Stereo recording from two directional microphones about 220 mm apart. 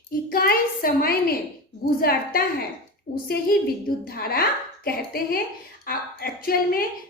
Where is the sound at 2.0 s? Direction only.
45° left (ahead or behind).